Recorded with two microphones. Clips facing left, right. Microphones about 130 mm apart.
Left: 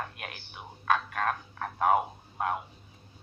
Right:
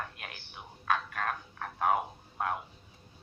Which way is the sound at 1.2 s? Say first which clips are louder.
Left 4 dB; 50° left (ahead or behind).